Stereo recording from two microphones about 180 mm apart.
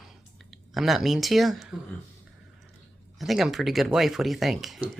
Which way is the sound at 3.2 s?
Centre (ahead or behind).